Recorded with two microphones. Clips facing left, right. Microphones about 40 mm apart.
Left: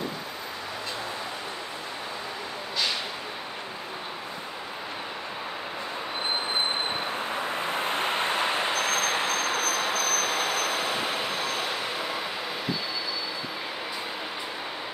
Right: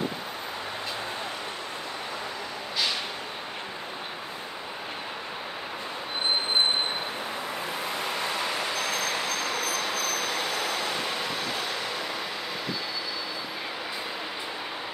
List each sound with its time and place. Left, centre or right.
7.5 s vehicle: left
9.9 s vehicle: centre